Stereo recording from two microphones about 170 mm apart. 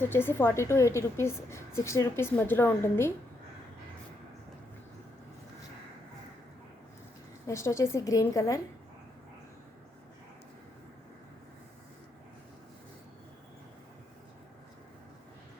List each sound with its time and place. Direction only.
0.0 s a woman's voice: 15° left (ahead or behind)
7.4 s a woman's voice: 15° left (ahead or behind)